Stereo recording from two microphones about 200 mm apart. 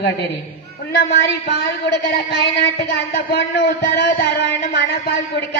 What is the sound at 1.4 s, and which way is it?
Speech, 55° left (ahead or behind).